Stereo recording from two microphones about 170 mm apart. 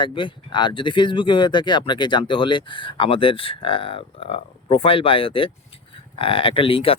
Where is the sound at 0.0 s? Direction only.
30° left (ahead or behind).